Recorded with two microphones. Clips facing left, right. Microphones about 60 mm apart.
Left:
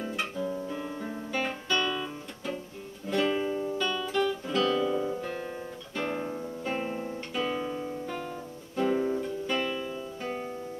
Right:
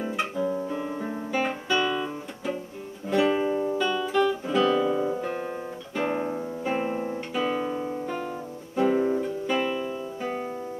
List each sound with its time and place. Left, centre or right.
0.4 s guitar: centre
3.1 s music: centre
3.7 s guitar: centre
8.7 s music: centre